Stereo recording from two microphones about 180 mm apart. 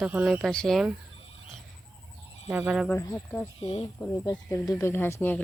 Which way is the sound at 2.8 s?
10° left (ahead or behind).